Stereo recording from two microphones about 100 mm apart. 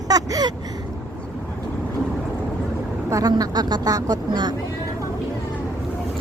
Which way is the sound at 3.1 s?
40° right (ahead or behind).